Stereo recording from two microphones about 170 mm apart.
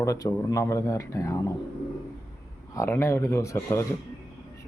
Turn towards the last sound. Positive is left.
turn(degrees=15)  # may be behind; listen again after turning